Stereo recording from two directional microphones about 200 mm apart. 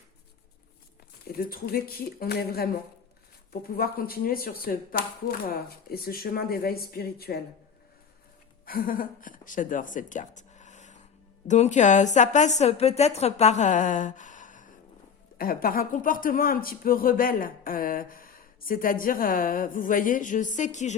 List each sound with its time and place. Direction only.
1.4 s speech: 50° left (ahead or behind)
8.6 s a woman's voice: 45° left (ahead or behind)